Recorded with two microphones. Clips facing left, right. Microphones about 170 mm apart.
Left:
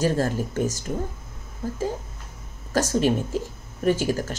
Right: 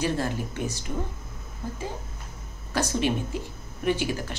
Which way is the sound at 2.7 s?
45° left (ahead or behind).